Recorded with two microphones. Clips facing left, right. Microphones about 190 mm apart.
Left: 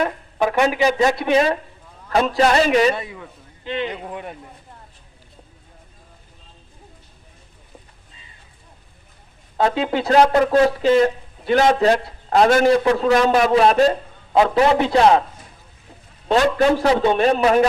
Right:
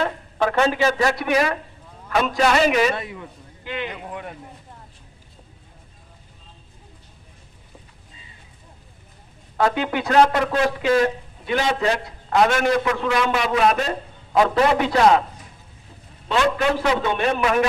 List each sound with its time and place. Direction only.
0.0 s a man's voice: 15° left (ahead or behind)
9.6 s a man's voice: 25° left (ahead or behind); by 13.5 s 45° left (ahead or behind)
13.5 s a man's voice: 30° left (ahead or behind)
16.3 s a man's voice: 35° left (ahead or behind)